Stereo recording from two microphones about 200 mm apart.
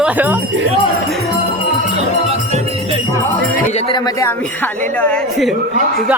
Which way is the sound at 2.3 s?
30° right (ahead or behind).